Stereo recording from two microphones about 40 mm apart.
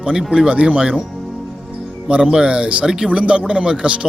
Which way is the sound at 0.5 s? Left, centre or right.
Right.